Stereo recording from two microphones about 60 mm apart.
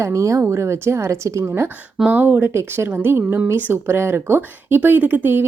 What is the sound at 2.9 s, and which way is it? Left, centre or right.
Speech, right.